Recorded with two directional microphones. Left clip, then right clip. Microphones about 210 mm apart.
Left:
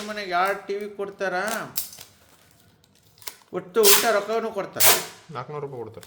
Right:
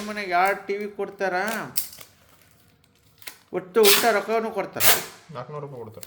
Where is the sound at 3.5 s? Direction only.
5° right (ahead or behind).